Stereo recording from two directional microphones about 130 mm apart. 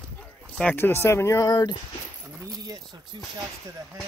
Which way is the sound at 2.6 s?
30° right (ahead or behind).